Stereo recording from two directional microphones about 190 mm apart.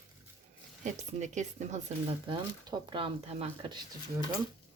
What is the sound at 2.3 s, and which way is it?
Speech, 25° right (ahead or behind).